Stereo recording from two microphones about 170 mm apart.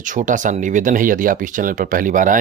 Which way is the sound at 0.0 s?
50° right (ahead or behind).